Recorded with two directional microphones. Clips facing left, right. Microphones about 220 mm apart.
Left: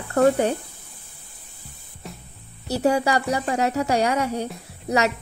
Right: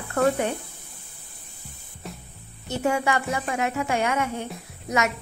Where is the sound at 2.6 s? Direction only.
35° left (ahead or behind).